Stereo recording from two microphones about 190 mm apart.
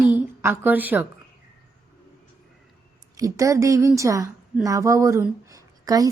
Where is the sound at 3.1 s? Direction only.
15° right (ahead or behind).